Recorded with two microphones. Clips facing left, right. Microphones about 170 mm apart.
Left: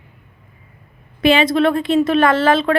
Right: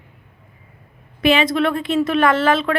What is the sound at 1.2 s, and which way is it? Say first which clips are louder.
A woman's voice: left 2 dB; 30° left (ahead or behind).